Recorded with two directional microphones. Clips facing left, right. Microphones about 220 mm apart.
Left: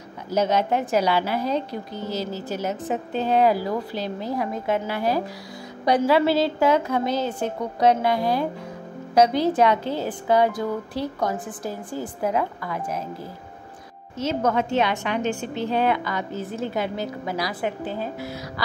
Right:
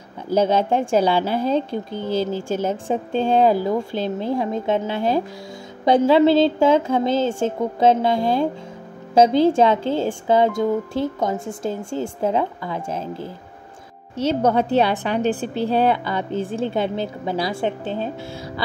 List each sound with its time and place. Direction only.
0.3 s a woman's voice: 30° right (ahead or behind)